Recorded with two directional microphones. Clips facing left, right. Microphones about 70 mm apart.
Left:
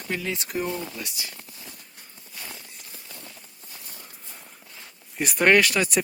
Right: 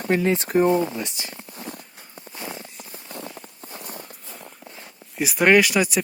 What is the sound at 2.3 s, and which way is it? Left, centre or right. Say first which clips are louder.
Walk: right 7 dB; right.